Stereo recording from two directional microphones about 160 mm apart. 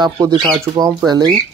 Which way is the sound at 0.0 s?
25° right (ahead or behind).